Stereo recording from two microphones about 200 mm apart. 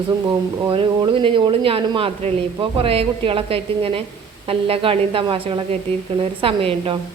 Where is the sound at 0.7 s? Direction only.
25° right (ahead or behind).